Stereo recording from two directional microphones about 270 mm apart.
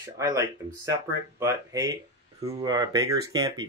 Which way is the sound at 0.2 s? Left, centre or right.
Centre.